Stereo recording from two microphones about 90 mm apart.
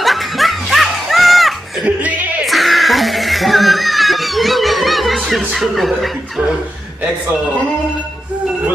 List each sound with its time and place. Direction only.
0.0 s music: centre (ahead or behind)
1.9 s music: 15° right (ahead or behind)
2.4 s music: centre (ahead or behind)